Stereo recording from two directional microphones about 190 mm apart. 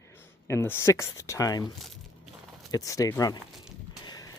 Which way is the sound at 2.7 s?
20° left (ahead or behind).